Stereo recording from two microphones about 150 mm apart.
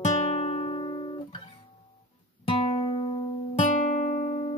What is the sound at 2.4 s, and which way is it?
Music, 35° left (ahead or behind).